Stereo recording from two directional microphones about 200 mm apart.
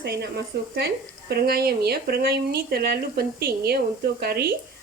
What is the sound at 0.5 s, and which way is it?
Speech, 50° right (ahead or behind).